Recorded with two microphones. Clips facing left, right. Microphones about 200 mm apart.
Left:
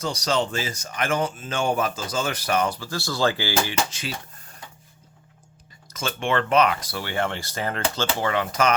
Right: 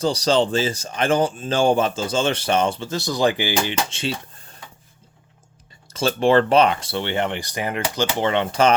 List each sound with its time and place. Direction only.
0.0 s speech: 30° right (ahead or behind)
5.9 s speech: 35° right (ahead or behind)